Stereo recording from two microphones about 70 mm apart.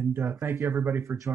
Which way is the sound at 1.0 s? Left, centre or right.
Right.